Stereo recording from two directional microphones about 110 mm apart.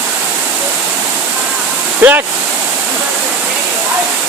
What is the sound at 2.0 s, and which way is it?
Speech, 15° right (ahead or behind).